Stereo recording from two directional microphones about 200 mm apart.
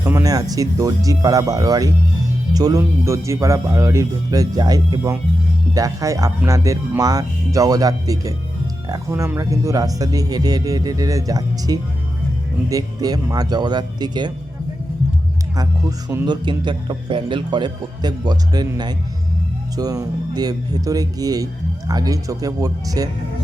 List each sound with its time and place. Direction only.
0.0 s a man's voice: 15° right (ahead or behind)
15.5 s a man's voice: 15° right (ahead or behind)